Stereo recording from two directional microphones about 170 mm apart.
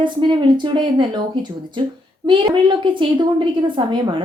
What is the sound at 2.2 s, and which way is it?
A woman's voice, 30° right (ahead or behind).